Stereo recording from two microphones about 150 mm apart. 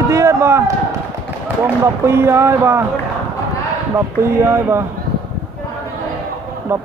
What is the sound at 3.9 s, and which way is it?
Speech, 20° right (ahead or behind).